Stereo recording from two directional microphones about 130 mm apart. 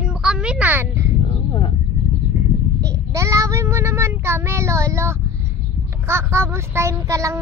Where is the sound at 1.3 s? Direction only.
40° left (ahead or behind).